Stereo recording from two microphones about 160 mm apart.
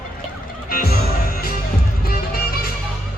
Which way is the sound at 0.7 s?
65° left (ahead or behind).